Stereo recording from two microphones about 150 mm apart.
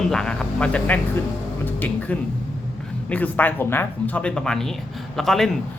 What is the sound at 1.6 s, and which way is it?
Music, 10° left (ahead or behind).